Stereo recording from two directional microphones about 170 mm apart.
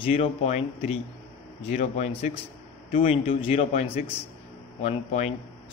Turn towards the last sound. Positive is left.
turn(degrees=40)  # may be behind; listen again after turning